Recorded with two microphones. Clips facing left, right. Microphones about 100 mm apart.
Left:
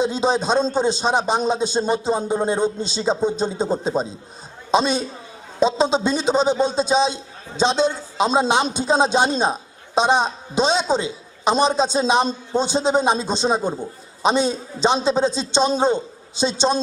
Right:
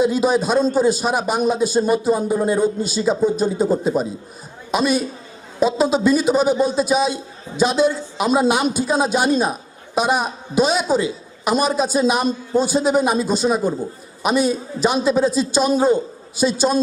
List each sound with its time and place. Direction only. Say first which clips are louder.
0.0 s a man's voice: right 3 dB; 25° left (ahead or behind)